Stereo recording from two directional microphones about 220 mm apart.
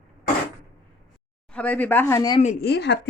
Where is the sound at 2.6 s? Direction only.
50° left (ahead or behind).